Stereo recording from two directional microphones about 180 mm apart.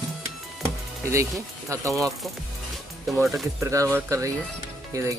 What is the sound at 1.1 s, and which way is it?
Speech, 15° right (ahead or behind).